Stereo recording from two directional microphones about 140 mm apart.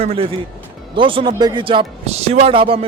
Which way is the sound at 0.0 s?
45° right (ahead or behind).